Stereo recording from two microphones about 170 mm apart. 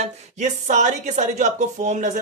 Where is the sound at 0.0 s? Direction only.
45° right (ahead or behind).